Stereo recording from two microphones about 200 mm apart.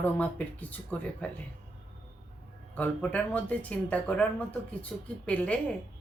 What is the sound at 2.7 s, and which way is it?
Speech, 5° left (ahead or behind).